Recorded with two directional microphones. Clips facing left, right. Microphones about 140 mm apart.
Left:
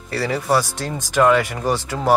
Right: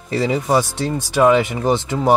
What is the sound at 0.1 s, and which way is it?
Speech, 15° right (ahead or behind).